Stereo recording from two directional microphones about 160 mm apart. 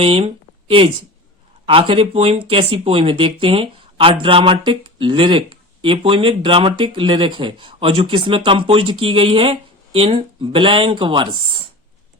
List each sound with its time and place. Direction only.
0.0 s speech: 35° right (ahead or behind)
1.6 s speech: 30° right (ahead or behind)